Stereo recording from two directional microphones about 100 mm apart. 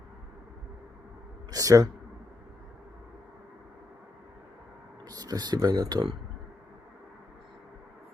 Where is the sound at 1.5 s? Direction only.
35° right (ahead or behind).